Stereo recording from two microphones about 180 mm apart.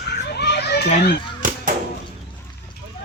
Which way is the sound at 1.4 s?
50° right (ahead or behind).